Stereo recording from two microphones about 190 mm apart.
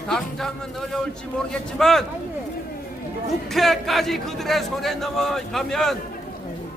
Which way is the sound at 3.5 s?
Centre (ahead or behind).